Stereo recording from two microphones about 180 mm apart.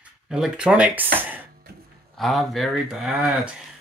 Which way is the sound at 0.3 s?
5° right (ahead or behind).